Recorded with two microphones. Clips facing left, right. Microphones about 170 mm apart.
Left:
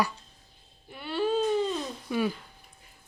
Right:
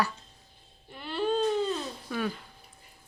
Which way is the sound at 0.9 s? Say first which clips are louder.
Left 1 dB; 5° left (ahead or behind).